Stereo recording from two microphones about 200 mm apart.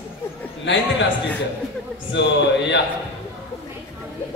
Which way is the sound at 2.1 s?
65° left (ahead or behind).